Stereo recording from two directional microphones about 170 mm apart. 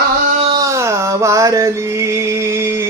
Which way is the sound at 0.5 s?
20° right (ahead or behind).